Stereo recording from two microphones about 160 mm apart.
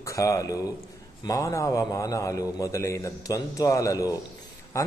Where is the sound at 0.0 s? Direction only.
20° left (ahead or behind).